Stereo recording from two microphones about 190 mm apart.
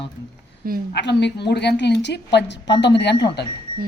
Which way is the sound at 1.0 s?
65° left (ahead or behind).